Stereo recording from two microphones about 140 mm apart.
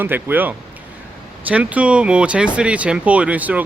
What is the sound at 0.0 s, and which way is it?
Speech, 15° right (ahead or behind).